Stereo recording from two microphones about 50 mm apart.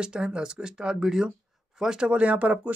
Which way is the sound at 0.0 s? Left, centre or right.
Centre.